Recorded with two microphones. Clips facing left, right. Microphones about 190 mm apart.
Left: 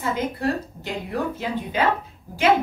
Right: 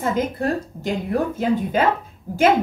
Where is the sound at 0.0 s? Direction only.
45° right (ahead or behind).